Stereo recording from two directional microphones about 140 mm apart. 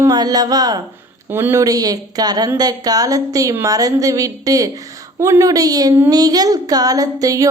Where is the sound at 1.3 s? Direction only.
15° right (ahead or behind).